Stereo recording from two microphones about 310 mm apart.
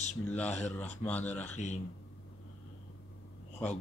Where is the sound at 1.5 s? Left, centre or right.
Left.